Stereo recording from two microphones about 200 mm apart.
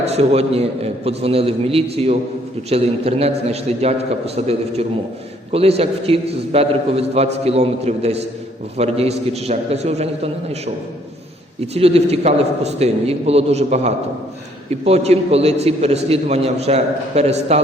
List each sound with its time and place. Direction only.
0.0 s a man's voice: 30° right (ahead or behind)
11.6 s a man's voice: 30° right (ahead or behind)